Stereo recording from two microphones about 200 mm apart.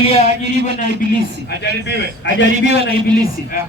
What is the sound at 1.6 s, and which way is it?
A man's voice, 60° left (ahead or behind).